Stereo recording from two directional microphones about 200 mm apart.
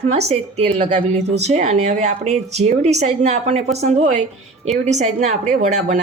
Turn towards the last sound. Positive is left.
turn(degrees=-35)  # may be behind; listen again after turning